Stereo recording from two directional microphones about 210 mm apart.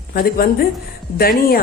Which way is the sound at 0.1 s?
45° left (ahead or behind).